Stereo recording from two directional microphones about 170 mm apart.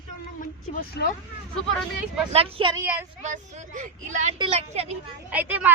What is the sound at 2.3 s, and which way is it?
Speech, 35° right (ahead or behind).